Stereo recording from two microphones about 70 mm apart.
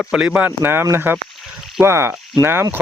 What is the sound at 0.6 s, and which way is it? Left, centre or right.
Speech, right.